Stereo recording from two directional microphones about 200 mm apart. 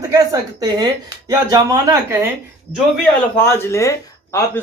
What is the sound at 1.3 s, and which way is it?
Speech, 20° right (ahead or behind).